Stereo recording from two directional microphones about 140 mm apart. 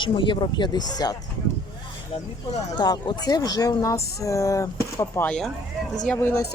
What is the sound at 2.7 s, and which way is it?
Speech, 30° left (ahead or behind).